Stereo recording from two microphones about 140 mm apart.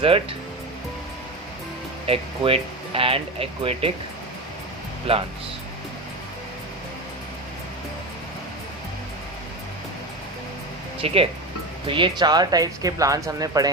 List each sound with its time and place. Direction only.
0.0 s speech: 40° right (ahead or behind)
2.0 s speech: 40° right (ahead or behind)
5.1 s speech: 45° right (ahead or behind)
11.0 s speech: 45° right (ahead or behind); by 13.7 s 25° right (ahead or behind)